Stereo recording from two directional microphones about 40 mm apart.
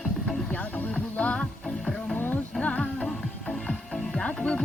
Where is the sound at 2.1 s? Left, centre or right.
Left.